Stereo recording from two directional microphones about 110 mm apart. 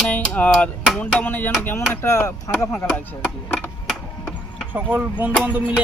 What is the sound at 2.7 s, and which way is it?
Speech, 15° left (ahead or behind).